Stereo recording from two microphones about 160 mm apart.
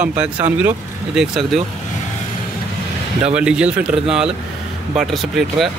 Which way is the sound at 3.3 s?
5° right (ahead or behind).